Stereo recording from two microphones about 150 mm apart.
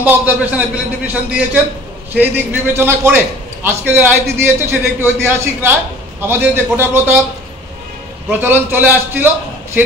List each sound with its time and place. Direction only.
0.0 s a man's voice: 10° right (ahead or behind)
8.3 s a man's voice: 15° right (ahead or behind)